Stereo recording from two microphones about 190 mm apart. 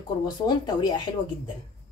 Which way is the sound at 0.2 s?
25° left (ahead or behind).